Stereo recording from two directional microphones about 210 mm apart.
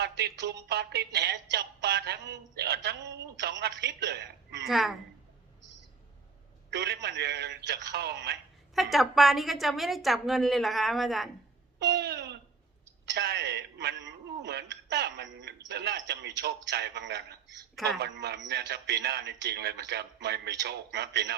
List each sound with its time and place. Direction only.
0.0 s a woman's voice: 50° right (ahead or behind)
4.6 s a woman's voice: centre (ahead or behind)
6.7 s a woman's voice: 55° right (ahead or behind)
8.7 s a woman's voice: centre (ahead or behind)
11.8 s a woman's voice: 50° right (ahead or behind)